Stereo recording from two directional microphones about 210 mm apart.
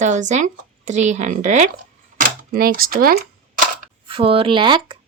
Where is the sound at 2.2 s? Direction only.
45° right (ahead or behind).